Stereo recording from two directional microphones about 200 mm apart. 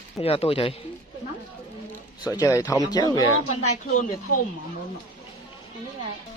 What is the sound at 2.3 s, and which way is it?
Speech, 15° left (ahead or behind).